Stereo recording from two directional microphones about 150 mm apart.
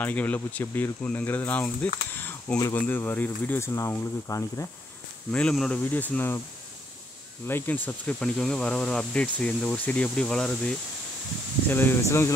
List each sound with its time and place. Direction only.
0.0 s speech: 10° left (ahead or behind)
5.3 s speech: 5° left (ahead or behind)
7.4 s speech: 15° left (ahead or behind)
11.7 s speech: 15° left (ahead or behind)